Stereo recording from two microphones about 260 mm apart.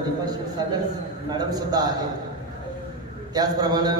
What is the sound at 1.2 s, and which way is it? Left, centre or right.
Speech, centre.